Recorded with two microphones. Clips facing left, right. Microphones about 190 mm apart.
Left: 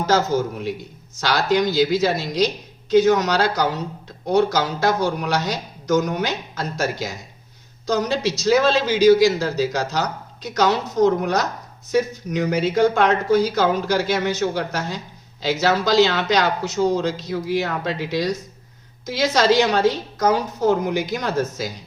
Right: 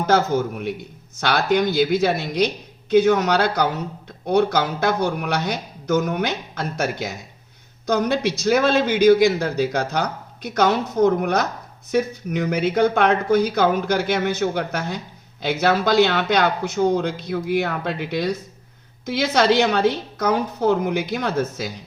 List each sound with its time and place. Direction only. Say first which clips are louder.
0.0 s speech: even; 55° right (ahead or behind)